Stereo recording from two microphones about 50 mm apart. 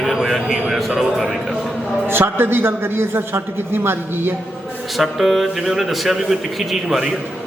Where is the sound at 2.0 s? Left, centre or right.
Right.